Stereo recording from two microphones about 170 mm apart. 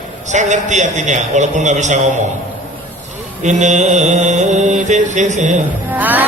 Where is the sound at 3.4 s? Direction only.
45° right (ahead or behind).